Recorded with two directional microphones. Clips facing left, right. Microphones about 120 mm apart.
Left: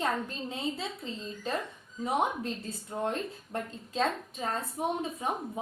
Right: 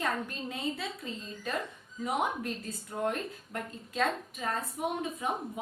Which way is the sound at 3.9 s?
30° left (ahead or behind).